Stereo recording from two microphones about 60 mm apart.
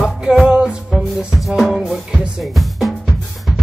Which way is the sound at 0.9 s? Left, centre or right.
Centre.